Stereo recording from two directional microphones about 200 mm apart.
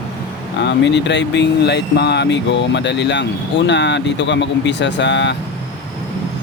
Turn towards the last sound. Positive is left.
turn(degrees=60)  # may be behind; listen again after turning